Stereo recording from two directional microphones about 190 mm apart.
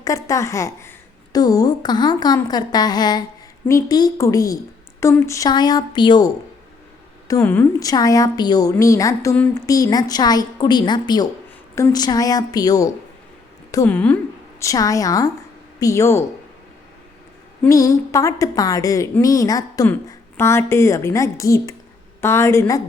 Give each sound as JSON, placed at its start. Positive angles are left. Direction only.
{"t": 0.0, "sound": "a woman's voice", "side_deg": 15}
{"t": 17.6, "sound": "a woman's voice", "side_deg": 15}